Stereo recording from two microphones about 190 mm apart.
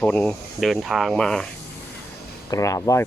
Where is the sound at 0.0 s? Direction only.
5° left (ahead or behind).